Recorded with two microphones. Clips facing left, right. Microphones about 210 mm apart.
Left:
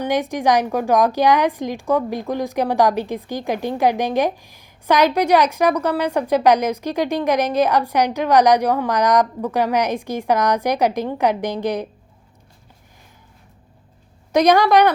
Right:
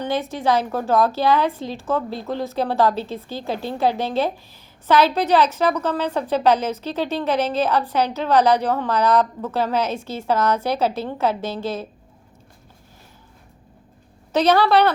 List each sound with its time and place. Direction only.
0.0 s a woman's voice: 15° left (ahead or behind)
14.3 s a woman's voice: 15° left (ahead or behind)